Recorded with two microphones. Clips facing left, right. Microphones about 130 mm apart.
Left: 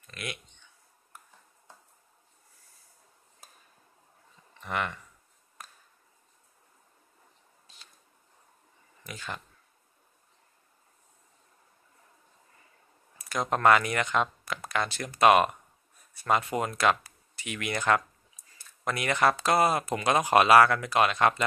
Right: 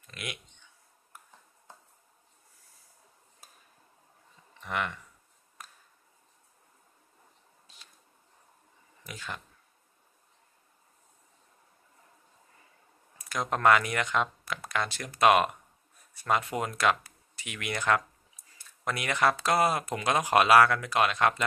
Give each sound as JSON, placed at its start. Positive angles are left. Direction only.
{"t": 0.0, "sound": "speech", "side_deg": -10}
{"t": 4.6, "sound": "speech", "side_deg": 0}
{"t": 9.0, "sound": "speech", "side_deg": 0}
{"t": 13.3, "sound": "speech", "side_deg": 5}